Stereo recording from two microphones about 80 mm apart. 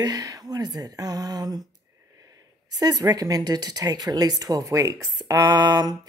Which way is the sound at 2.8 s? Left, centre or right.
Right.